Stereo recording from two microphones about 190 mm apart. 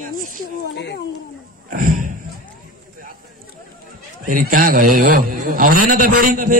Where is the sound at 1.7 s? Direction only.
45° right (ahead or behind).